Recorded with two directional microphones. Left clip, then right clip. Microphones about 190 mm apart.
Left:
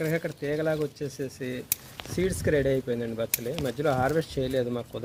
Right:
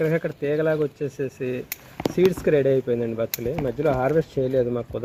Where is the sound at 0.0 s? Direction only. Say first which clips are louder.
Right 6 dB; 40° right (ahead or behind).